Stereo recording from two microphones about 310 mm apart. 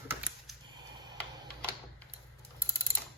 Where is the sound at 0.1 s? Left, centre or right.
Centre.